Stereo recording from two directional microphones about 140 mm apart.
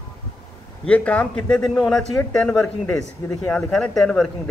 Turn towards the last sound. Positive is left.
turn(degrees=0)  # may be behind; listen again after turning